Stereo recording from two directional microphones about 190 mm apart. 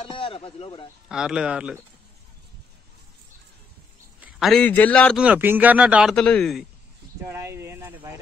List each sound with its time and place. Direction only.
0.0 s speech: 30° left (ahead or behind)
1.0 s speech: 5° right (ahead or behind)
4.2 s a man's voice: centre (ahead or behind)
5.1 s speech: 5° right (ahead or behind)
7.2 s a sound: 15° right (ahead or behind)